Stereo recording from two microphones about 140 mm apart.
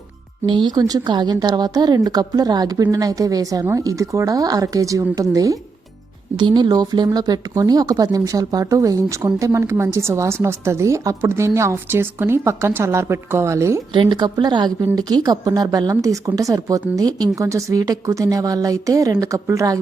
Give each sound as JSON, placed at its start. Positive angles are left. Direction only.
{"t": 0.4, "sound": "speech", "side_deg": -35}
{"t": 13.9, "sound": "a woman's voice", "side_deg": -35}